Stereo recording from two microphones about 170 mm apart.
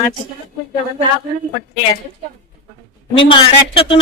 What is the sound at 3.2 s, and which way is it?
Speech, 30° left (ahead or behind).